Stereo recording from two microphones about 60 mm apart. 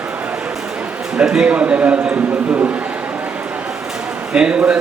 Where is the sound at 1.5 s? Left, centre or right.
Right.